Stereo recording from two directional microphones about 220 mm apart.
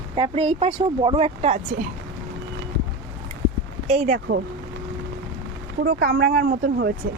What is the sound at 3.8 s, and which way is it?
Speech, 30° right (ahead or behind).